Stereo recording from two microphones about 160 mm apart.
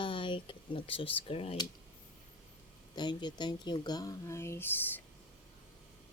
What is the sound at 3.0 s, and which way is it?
Speech, 25° left (ahead or behind).